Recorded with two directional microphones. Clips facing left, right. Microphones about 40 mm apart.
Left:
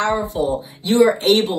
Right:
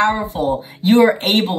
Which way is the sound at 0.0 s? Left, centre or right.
Right.